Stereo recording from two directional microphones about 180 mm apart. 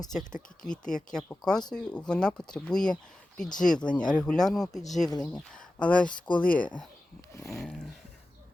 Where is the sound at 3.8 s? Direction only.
5° left (ahead or behind).